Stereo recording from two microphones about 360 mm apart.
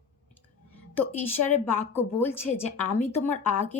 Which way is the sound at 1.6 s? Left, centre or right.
Centre.